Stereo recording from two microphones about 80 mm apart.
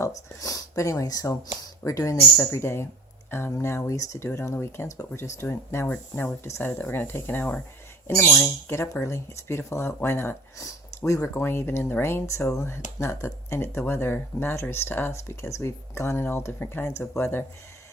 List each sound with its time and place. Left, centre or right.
0.0 s speech: left
10.6 s speech: left
11.3 s speech: left
15.1 s speech: left